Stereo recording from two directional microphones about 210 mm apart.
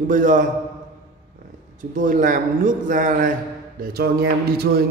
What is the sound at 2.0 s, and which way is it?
A man's voice, 40° right (ahead or behind).